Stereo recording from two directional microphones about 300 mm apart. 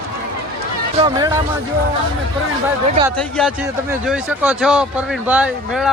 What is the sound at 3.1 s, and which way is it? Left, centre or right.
A man's voice, centre.